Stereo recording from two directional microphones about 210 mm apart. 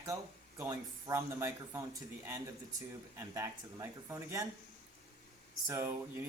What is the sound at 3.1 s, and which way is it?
Speech, 15° right (ahead or behind).